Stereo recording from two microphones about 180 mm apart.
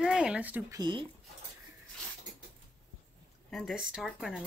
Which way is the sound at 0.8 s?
25° right (ahead or behind).